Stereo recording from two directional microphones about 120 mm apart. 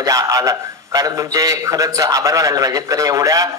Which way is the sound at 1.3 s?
25° right (ahead or behind).